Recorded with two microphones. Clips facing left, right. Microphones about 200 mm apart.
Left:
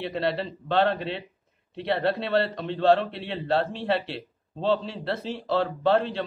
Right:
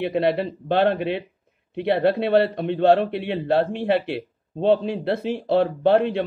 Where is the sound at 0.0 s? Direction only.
55° right (ahead or behind).